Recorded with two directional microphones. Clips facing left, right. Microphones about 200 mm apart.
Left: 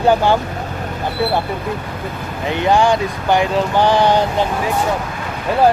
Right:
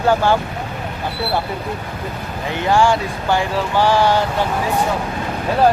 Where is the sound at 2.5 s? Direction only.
20° left (ahead or behind).